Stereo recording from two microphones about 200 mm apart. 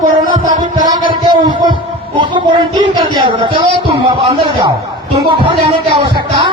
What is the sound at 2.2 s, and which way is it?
Speech, 25° right (ahead or behind).